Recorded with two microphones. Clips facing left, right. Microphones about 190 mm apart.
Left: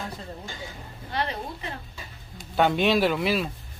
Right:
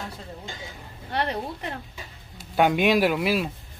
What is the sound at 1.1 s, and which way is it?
Speech, 65° right (ahead or behind).